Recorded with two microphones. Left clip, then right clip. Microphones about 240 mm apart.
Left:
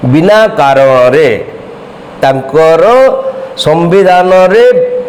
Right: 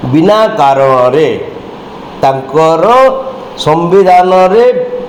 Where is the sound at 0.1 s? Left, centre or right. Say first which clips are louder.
Left 2 dB; left.